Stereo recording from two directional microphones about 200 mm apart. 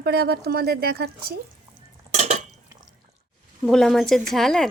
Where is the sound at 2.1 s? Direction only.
35° right (ahead or behind).